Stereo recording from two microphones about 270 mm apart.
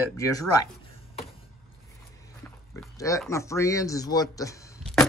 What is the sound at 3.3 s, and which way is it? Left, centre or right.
Speech, centre.